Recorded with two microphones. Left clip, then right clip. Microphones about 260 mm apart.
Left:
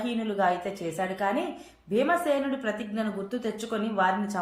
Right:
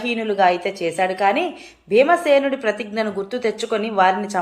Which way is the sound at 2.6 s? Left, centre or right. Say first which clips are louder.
Right 9 dB; right.